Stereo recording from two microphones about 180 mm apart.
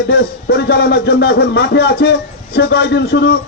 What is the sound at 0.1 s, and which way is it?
A man's voice, 65° left (ahead or behind).